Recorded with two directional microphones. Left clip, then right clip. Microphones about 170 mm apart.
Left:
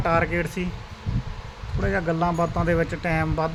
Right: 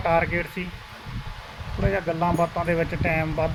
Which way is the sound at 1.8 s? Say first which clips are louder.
Even; 5° left (ahead or behind).